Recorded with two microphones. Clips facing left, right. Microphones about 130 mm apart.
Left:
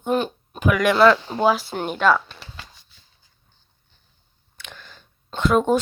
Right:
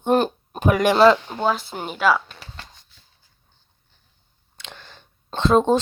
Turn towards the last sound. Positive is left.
turn(degrees=-30)  # may be behind; listen again after turning